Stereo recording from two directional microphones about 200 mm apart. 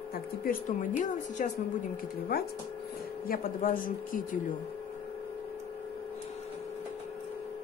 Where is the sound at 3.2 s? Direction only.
45° left (ahead or behind).